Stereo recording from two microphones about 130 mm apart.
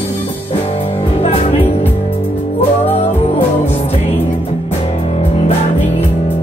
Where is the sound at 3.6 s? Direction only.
50° left (ahead or behind).